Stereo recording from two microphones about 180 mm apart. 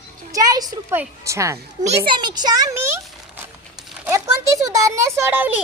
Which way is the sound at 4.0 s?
15° right (ahead or behind).